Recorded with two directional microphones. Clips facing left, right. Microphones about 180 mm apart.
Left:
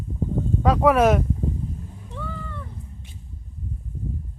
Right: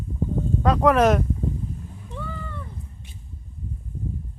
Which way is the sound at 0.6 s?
5° left (ahead or behind).